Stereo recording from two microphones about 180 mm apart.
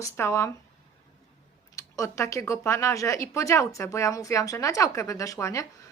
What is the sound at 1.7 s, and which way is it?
Speech, 15° left (ahead or behind).